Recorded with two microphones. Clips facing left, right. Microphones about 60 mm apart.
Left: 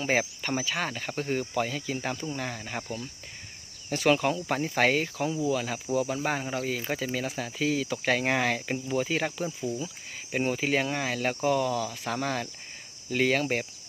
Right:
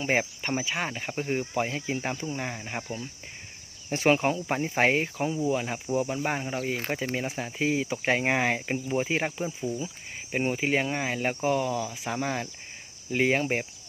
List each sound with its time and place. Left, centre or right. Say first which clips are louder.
0.0 s speech: even; centre
3.8 s speech: right 1 dB; right; by 6.6 s centre
6.6 s speech: right 1 dB; right
9.6 s cricket: right 1 dB; centre
10.3 s speech: right 1 dB; centre